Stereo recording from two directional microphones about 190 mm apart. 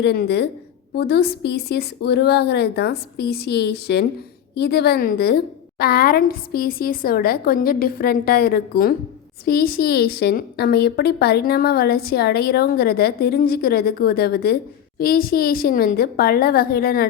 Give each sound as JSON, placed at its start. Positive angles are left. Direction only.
{"t": 0.0, "sound": "a woman's voice", "side_deg": 60}